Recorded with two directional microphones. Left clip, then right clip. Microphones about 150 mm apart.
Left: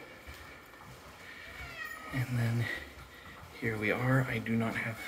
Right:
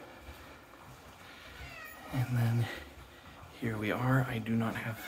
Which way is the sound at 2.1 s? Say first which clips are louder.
Right 3 dB; 15° right (ahead or behind).